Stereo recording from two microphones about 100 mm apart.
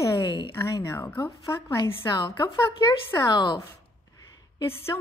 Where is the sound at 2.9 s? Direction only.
50° left (ahead or behind).